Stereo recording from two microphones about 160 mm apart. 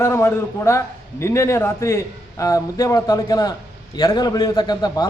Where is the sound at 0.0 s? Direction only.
15° left (ahead or behind).